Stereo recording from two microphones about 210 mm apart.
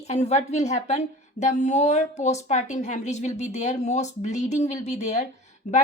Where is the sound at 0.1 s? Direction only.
35° left (ahead or behind).